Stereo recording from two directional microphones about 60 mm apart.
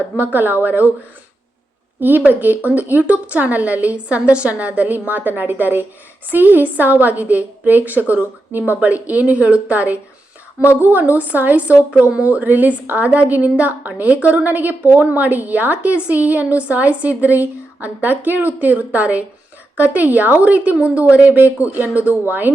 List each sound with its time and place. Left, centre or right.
0.2 s speech: right
2.0 s a woman's voice: right